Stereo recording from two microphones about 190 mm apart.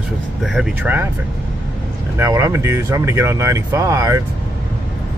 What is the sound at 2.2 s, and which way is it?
Speech, 15° right (ahead or behind).